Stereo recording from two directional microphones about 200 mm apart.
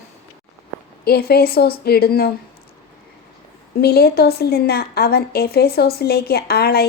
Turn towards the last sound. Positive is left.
turn(degrees=50)  # may be behind; listen again after turning